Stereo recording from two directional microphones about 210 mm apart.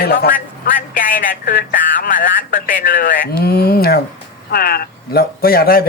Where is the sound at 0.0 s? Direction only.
45° left (ahead or behind).